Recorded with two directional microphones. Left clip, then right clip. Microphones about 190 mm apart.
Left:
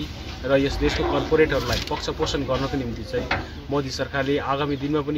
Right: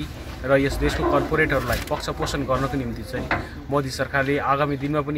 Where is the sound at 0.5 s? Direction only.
10° right (ahead or behind).